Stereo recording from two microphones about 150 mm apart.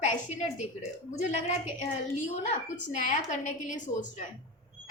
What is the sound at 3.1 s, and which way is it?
A woman's voice, 55° left (ahead or behind).